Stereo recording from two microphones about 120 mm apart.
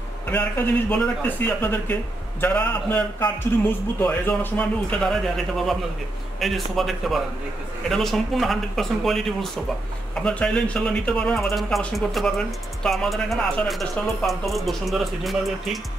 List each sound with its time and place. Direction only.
0.3 s a man's voice: 15° left (ahead or behind); by 15.8 s centre (ahead or behind)